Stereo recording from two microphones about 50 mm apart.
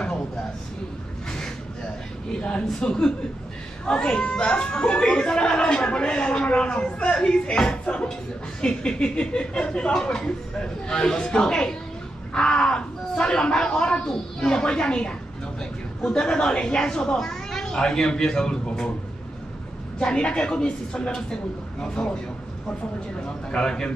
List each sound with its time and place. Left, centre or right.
2.4 s speech: centre
20.0 s speech: left
23.5 s speech: centre